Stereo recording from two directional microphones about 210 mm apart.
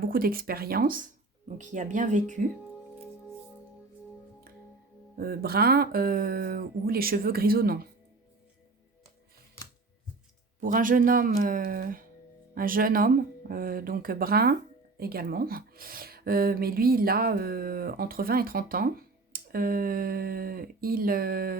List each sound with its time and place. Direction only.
0.0 s speech: 45° right (ahead or behind)
5.1 s speech: 45° right (ahead or behind)
10.6 s speech: 40° right (ahead or behind)